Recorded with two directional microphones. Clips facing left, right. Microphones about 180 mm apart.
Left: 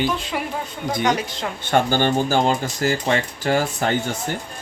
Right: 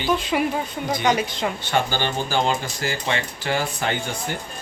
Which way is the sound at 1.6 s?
50° left (ahead or behind).